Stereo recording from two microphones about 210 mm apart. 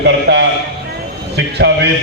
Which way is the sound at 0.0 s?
55° right (ahead or behind).